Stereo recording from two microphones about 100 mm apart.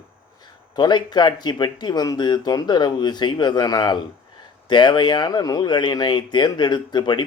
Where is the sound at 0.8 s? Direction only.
45° left (ahead or behind).